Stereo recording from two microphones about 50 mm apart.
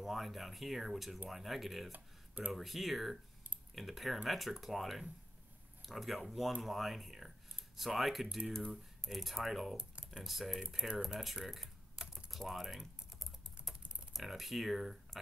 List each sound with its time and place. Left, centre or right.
0.0 s speech: centre
1.9 s speech: right
2.5 s speech: centre
9.8 s speech: centre
10.2 s speech: centre
12.3 s typing: centre
14.1 s speech: centre